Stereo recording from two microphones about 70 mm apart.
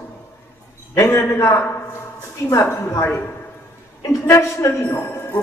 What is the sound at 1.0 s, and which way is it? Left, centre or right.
Speech, left.